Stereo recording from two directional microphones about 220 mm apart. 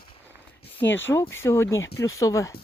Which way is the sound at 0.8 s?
10° left (ahead or behind).